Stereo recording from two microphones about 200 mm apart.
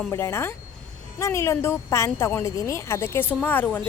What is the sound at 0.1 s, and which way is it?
A woman's voice, 15° left (ahead or behind).